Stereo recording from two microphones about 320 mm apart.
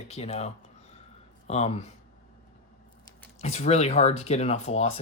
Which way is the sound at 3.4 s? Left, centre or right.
Centre.